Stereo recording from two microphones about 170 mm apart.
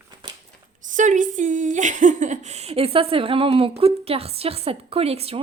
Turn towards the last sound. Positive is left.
turn(degrees=-35)  # may be behind; listen again after turning